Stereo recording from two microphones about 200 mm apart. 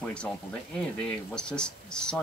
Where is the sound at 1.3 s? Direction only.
5° left (ahead or behind).